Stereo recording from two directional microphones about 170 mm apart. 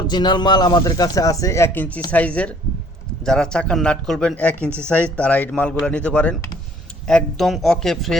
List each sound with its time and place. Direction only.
0.1 s speech: 25° left (ahead or behind); by 8.2 s centre (ahead or behind)